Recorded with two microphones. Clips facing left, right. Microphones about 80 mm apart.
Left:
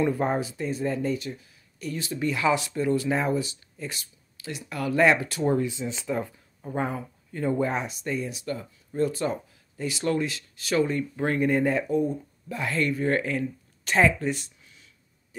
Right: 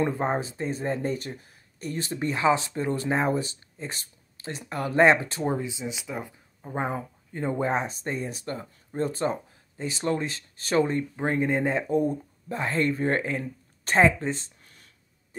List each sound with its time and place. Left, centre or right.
0.0 s speech: right
11.9 s speech: right
14.6 s a sound: right